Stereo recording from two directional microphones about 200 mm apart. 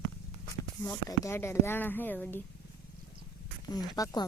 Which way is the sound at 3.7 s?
20° left (ahead or behind).